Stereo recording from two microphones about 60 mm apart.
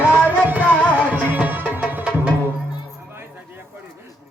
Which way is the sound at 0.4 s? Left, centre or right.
Right.